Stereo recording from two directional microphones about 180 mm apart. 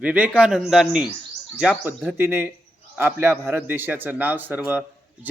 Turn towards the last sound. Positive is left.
turn(degrees=-10)  # may be behind; listen again after turning